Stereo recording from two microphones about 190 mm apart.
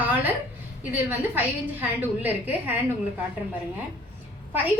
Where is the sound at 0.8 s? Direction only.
10° right (ahead or behind).